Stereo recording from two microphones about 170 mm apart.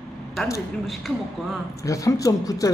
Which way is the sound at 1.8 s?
20° left (ahead or behind).